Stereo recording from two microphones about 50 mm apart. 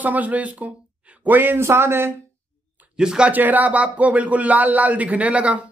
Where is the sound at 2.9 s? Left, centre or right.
Centre.